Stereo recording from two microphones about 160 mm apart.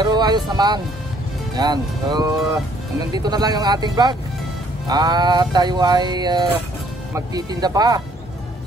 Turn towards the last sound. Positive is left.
turn(degrees=-25)  # may be behind; listen again after turning